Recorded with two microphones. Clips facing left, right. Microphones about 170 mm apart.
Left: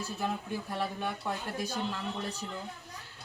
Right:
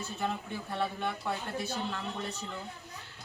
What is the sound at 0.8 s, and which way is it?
Speech, 10° left (ahead or behind).